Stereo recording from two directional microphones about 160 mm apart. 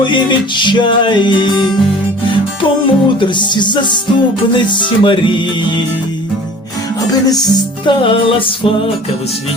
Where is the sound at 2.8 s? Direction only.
30° left (ahead or behind).